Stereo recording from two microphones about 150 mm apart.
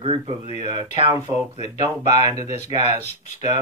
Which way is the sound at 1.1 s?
20° right (ahead or behind).